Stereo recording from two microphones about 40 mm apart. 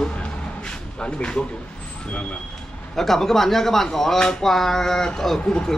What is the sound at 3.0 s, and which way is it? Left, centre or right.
Speech, centre.